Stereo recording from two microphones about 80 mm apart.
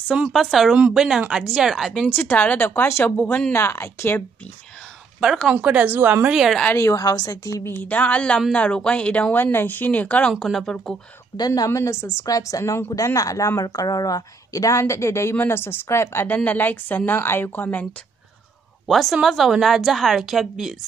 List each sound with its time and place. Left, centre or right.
0.3 s a woman's voice: centre
2.3 s a woman's voice: centre
3.5 s a woman's voice: left
5.5 s speech: centre
5.9 s a woman's voice: right
6.2 s speech: centre
6.8 s a woman's voice: left
7.6 s speech: left
10.4 s speech: centre
11.3 s a woman's voice: left
12.3 s a woman's voice: left
18.9 s a woman's voice: centre